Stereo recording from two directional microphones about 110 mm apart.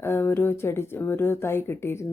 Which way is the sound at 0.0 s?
20° left (ahead or behind).